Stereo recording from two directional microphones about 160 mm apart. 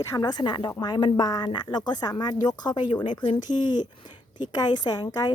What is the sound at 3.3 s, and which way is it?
Speech, 55° left (ahead or behind).